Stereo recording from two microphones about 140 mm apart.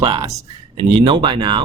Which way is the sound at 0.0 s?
40° right (ahead or behind).